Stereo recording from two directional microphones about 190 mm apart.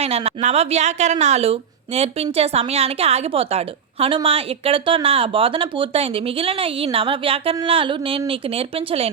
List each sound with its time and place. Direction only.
0.0 s a woman's voice: 35° right (ahead or behind)